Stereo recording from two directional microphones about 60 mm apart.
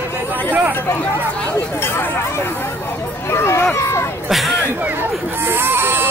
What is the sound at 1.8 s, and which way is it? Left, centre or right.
Speech, left.